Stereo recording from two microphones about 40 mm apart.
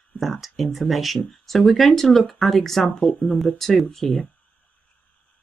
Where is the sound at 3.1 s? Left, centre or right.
Left.